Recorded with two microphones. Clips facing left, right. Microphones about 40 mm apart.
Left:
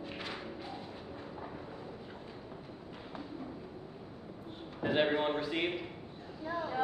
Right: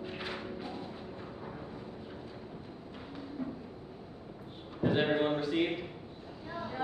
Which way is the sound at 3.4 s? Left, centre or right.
Centre.